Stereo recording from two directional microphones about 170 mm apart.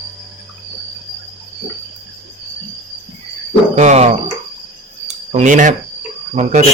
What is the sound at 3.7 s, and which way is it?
Speech, 40° right (ahead or behind).